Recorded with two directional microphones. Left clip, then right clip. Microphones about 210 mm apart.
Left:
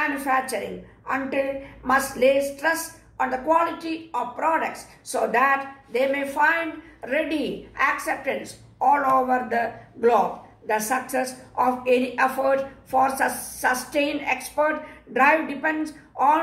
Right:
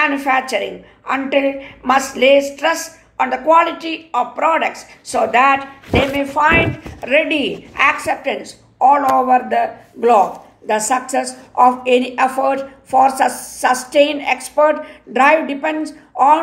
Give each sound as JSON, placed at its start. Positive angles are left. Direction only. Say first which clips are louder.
{"t": 0.0, "sound": "a woman's voice", "louder": "right 8 dB", "side_deg": -30}